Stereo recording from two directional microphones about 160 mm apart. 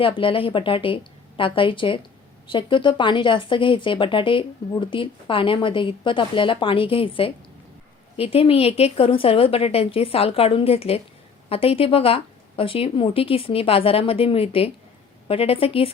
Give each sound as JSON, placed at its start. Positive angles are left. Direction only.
{"t": 0.0, "sound": "speech", "side_deg": 35}